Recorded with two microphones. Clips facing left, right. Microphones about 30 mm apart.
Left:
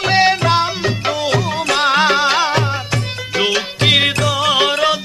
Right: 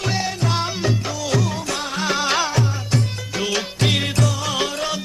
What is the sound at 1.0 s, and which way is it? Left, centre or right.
Music, left.